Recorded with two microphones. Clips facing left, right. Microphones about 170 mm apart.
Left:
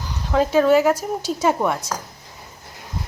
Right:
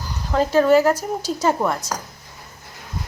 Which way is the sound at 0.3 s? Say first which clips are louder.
Even; centre (ahead or behind).